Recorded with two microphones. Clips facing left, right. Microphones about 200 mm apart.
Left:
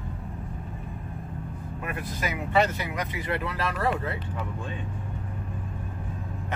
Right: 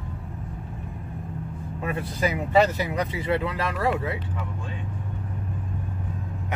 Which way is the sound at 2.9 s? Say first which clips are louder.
Right 5 dB; 30° right (ahead or behind).